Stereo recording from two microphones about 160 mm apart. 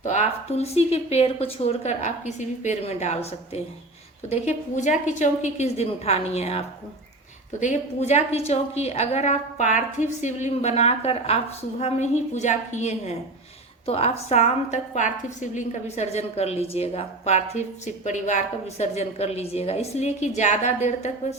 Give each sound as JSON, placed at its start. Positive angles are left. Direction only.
{"t": 0.0, "sound": "a woman's voice", "side_deg": 45}
{"t": 7.6, "sound": "a woman's voice", "side_deg": 45}